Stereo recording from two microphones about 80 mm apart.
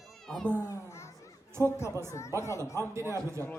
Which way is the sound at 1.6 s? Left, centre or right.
Left.